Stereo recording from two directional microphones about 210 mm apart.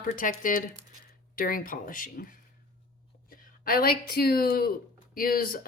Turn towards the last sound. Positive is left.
turn(degrees=45)  # may be behind; listen again after turning